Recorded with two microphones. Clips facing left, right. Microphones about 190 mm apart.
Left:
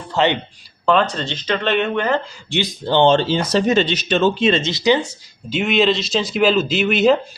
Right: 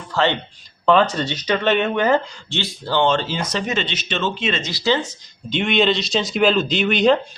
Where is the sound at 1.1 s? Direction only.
15° right (ahead or behind).